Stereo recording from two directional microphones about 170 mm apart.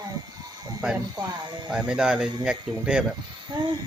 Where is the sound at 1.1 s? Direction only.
25° right (ahead or behind).